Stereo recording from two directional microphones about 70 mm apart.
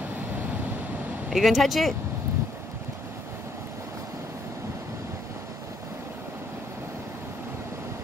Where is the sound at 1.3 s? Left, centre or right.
Centre.